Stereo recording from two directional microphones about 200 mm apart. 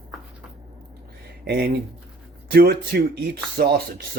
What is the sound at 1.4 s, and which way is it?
Speech, 50° right (ahead or behind).